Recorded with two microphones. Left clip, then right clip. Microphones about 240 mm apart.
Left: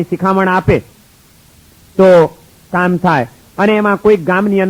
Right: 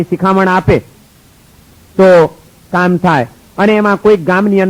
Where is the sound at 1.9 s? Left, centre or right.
Right.